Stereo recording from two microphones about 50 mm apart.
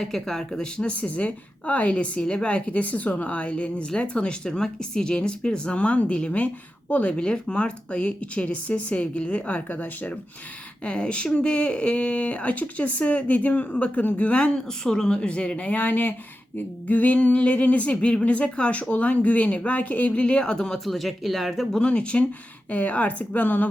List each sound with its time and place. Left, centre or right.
0.0 s speech: centre; by 20.2 s left
20.2 s speech: centre
20.7 s speech: centre
21.8 s a woman's voice: left